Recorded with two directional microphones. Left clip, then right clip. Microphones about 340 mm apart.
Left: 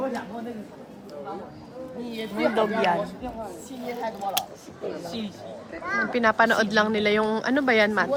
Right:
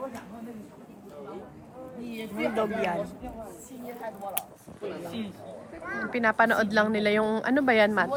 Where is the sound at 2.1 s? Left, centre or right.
Left.